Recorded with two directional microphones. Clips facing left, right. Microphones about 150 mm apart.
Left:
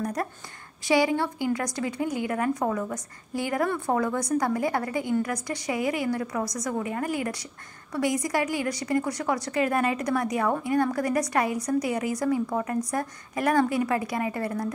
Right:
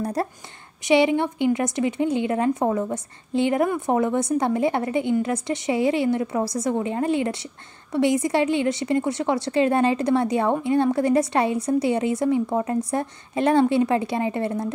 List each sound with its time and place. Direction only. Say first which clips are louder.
0.0 s a woman's voice: right 4 dB; 30° right (ahead or behind)